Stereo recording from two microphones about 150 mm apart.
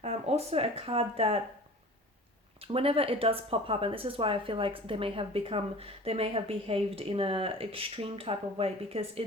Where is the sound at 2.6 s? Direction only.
40° right (ahead or behind).